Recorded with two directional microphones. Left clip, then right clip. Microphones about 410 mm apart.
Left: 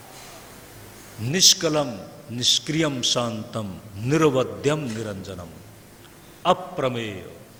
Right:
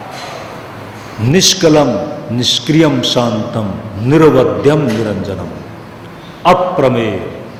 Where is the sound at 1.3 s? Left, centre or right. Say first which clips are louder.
Right 10 dB; left.